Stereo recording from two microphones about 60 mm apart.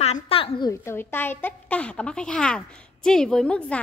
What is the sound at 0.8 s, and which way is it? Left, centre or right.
Speech, left.